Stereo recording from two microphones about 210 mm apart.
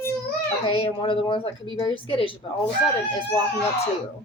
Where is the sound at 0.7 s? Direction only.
25° left (ahead or behind).